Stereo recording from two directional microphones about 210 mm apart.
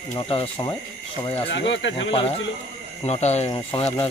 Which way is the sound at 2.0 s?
25° left (ahead or behind).